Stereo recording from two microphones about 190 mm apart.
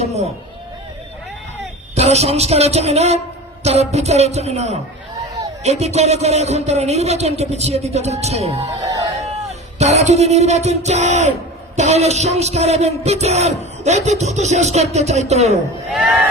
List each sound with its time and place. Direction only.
0.0 s speech: 35° right (ahead or behind)
2.0 s speech: 35° right (ahead or behind)
9.2 s music: 35° right (ahead or behind)
11.8 s speech: 35° right (ahead or behind)